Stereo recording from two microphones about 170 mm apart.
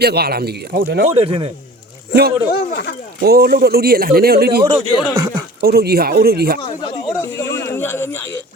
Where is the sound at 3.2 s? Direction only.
65° right (ahead or behind).